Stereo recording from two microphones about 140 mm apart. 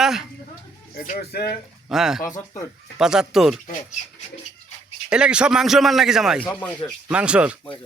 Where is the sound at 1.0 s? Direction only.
90° left.